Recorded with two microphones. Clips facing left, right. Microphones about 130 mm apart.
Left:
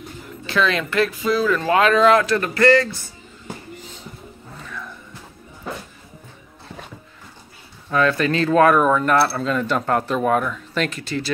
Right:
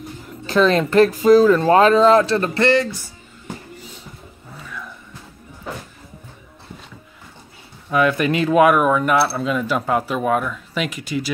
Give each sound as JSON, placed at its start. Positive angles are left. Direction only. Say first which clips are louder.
{"t": 0.5, "sound": "speech", "louder": "right 5 dB", "side_deg": -40}
{"t": 4.6, "sound": "music", "louder": "right 1 dB", "side_deg": -5}
{"t": 7.9, "sound": "speech", "louder": "right 1 dB", "side_deg": -15}